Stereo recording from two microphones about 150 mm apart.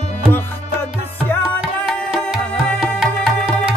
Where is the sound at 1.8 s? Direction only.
Centre (ahead or behind).